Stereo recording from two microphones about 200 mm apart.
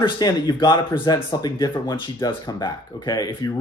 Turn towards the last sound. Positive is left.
turn(degrees=20)  # may be behind; listen again after turning